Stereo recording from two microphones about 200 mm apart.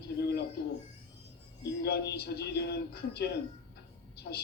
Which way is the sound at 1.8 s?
55° left (ahead or behind).